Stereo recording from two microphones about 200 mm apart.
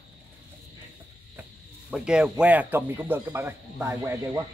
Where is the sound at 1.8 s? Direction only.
5° right (ahead or behind).